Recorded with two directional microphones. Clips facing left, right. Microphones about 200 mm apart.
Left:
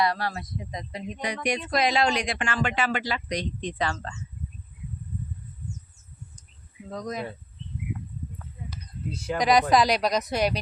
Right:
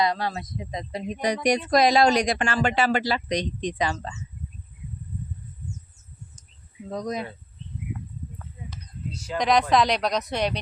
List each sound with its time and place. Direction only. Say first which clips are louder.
0.0 s speech: right 1 dB; 20° right (ahead or behind)
0.9 s speech: right 6 dB; 40° right (ahead or behind)
3.2 s speech: right 4 dB; 20° right (ahead or behind)
6.9 s speech: right 3 dB; 20° right (ahead or behind)
9.1 s speech: left 2 dB; 55° left (ahead or behind)
9.4 s speech: even; 5° left (ahead or behind)